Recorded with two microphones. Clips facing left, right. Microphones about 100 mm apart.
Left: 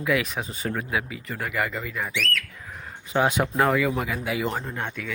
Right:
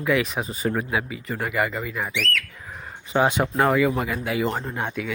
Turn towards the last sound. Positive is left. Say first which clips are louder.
# right 3 dB
turn(degrees=-10)  # may be behind; listen again after turning